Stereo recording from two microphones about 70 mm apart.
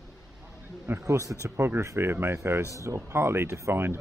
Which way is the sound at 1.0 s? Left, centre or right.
Right.